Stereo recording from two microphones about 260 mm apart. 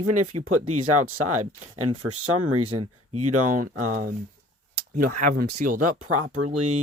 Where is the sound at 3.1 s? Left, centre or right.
Right.